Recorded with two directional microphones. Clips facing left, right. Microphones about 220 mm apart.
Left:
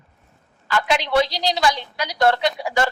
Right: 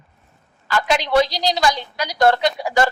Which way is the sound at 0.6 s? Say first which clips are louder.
Right 1 dB; 40° right (ahead or behind).